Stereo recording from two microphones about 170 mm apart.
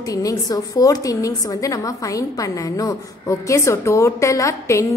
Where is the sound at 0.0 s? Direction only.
20° left (ahead or behind).